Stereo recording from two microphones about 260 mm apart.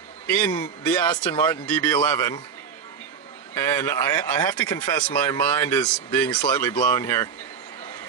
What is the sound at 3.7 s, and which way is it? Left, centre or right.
Speech, centre.